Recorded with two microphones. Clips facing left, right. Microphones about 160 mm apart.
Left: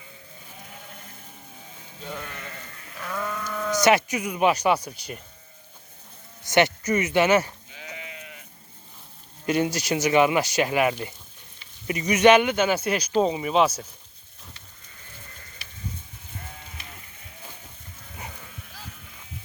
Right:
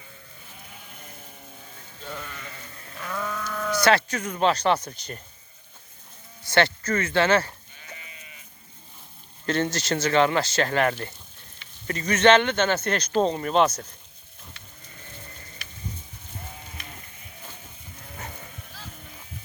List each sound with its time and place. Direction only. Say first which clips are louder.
2.0 s sheep: left 1 dB; 5° left (ahead or behind)
3.7 s speech: left 1 dB; 15° left (ahead or behind)
6.5 s speech: left 2 dB; 15° left (ahead or behind)
7.7 s sheep: left 6 dB; 80° left
9.5 s speech: left 2 dB; 10° left (ahead or behind)